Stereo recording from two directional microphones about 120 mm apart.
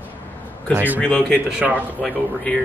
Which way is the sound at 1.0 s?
10° left (ahead or behind).